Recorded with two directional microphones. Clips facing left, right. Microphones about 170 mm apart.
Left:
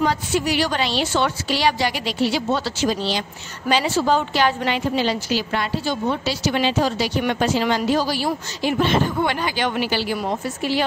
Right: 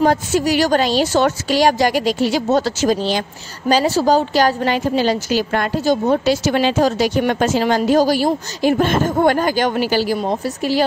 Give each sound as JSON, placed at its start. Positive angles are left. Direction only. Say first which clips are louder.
{"t": 0.0, "sound": "a woman's voice", "louder": "right 5 dB", "side_deg": -45}